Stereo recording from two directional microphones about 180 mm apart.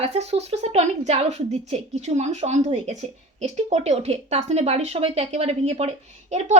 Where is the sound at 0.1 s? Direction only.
35° right (ahead or behind).